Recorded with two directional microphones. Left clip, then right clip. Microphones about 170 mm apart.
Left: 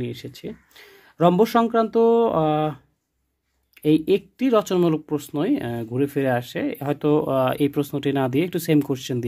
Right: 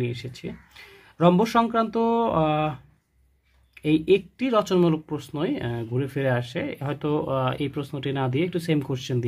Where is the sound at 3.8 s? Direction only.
50° left (ahead or behind).